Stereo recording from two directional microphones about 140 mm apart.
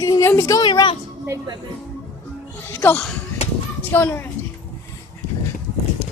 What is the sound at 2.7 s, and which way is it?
Music, 15° left (ahead or behind).